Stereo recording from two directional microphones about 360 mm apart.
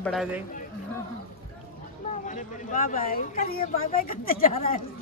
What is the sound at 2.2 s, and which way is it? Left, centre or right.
Speech, left.